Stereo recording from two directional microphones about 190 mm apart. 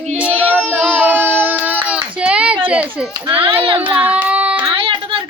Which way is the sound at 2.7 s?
5° right (ahead or behind).